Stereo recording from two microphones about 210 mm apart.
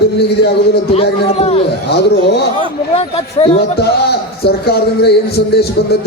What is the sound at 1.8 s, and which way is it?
Speech, 55° left (ahead or behind).